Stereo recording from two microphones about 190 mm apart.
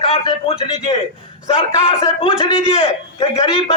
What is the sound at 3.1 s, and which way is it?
Speech, 30° left (ahead or behind).